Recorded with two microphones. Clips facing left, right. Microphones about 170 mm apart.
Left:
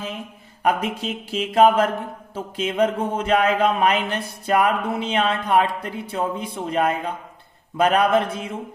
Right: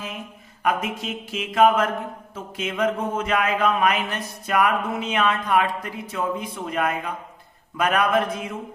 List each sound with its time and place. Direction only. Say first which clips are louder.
0.6 s a man's voice: left 2 dB; 35° left (ahead or behind)